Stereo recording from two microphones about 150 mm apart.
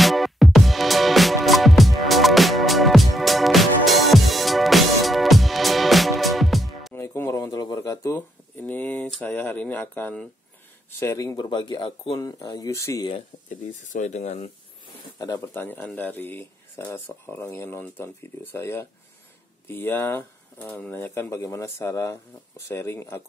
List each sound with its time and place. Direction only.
0.0 s music: centre (ahead or behind)
6.9 s a sound: 15° left (ahead or behind)
9.2 s speech: 15° left (ahead or behind)
13.5 s speech: 55° left (ahead or behind)
15.1 s speech: 20° left (ahead or behind)